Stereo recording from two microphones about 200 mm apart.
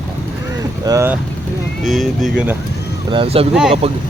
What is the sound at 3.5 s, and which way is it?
Speech, centre (ahead or behind).